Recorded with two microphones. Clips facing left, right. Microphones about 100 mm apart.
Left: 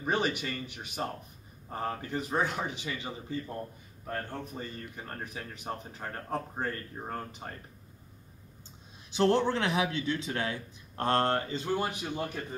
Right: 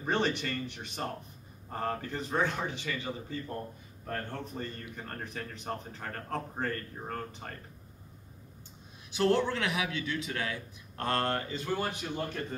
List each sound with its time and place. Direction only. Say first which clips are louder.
0.0 s speech: even; 10° left (ahead or behind)
4.6 s speech: right 1 dB; 10° left (ahead or behind)
9.1 s a man's voice: left 2 dB; 30° left (ahead or behind)